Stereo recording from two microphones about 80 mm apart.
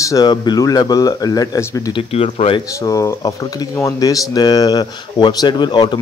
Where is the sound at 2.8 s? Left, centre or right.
Left.